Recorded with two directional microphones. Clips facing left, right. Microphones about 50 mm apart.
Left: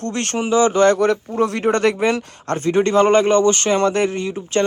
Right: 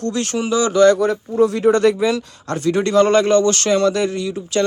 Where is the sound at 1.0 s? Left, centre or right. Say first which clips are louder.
Right 1 dB; left.